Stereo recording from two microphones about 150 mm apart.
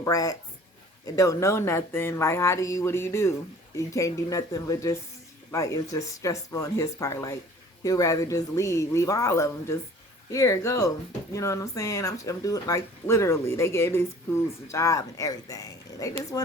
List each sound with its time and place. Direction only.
0.0 s speech: 20° left (ahead or behind)